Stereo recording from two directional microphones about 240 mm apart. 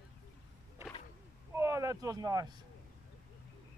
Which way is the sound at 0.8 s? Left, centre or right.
Centre.